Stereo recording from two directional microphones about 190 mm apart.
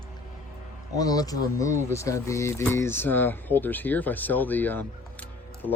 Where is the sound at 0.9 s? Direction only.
20° left (ahead or behind).